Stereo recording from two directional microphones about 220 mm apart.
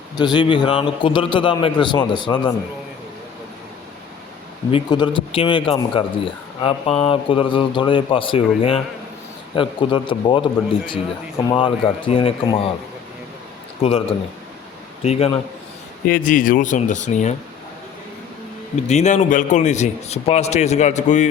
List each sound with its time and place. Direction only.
0.2 s speech: 20° left (ahead or behind)
4.7 s speech: 20° left (ahead or behind)
13.7 s speech: 25° left (ahead or behind)
16.0 s a man's voice: 40° left (ahead or behind)
18.8 s a man's voice: 30° left (ahead or behind)